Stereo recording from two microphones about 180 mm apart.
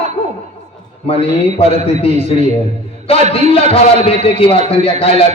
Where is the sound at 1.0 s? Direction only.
35° left (ahead or behind).